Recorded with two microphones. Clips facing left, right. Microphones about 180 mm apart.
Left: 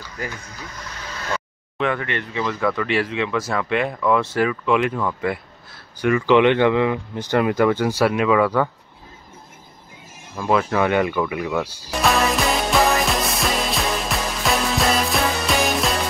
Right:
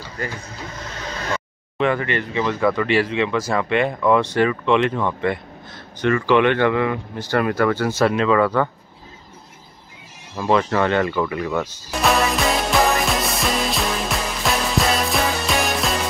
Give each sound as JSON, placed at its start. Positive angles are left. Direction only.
{"t": 1.8, "sound": "speech", "side_deg": 0}
{"t": 10.5, "sound": "speech", "side_deg": 5}
{"t": 11.9, "sound": "music", "side_deg": 0}